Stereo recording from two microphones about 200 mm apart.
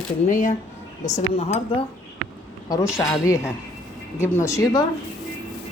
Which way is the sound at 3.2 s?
15° left (ahead or behind).